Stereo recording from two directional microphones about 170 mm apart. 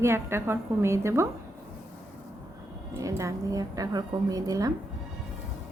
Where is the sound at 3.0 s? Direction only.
20° right (ahead or behind).